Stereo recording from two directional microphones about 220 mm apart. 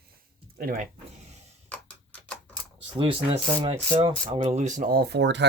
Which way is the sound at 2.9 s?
25° right (ahead or behind).